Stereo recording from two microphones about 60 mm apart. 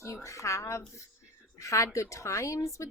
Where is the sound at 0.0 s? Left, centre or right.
Left.